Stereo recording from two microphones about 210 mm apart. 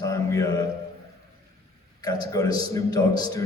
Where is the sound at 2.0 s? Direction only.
20° left (ahead or behind).